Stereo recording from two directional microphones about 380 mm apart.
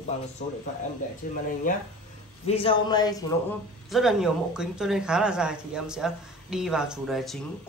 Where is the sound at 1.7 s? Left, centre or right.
Left.